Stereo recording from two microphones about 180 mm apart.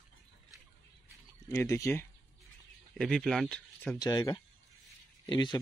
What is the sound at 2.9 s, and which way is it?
Speech, 5° left (ahead or behind).